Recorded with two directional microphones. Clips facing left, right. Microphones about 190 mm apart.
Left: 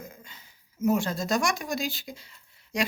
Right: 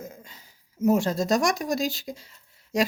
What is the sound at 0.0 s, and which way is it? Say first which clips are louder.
Speech: right 4 dB; 40° right (ahead or behind).